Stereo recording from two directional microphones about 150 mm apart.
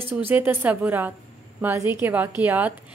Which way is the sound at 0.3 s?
15° right (ahead or behind).